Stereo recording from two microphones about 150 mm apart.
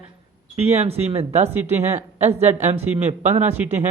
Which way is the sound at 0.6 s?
45° right (ahead or behind).